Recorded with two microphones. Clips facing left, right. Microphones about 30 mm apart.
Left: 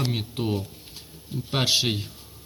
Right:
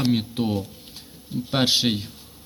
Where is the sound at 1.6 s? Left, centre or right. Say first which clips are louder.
Right 2 dB; right.